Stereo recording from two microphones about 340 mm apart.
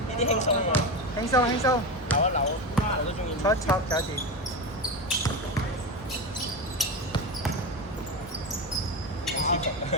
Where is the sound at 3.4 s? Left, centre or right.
Centre.